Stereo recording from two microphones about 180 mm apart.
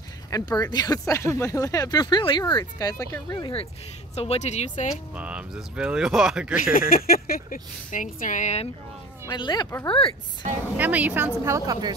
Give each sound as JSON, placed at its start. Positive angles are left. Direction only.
{"t": 0.3, "sound": "speech", "side_deg": 20}
{"t": 4.1, "sound": "speech", "side_deg": 35}
{"t": 5.1, "sound": "speech", "side_deg": -5}
{"t": 6.7, "sound": "speech", "side_deg": 50}
{"t": 9.3, "sound": "speech", "side_deg": 25}
{"t": 10.8, "sound": "a woman's voice", "side_deg": -10}